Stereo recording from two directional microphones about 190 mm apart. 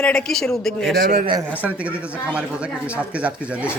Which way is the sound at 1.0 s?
45° right (ahead or behind).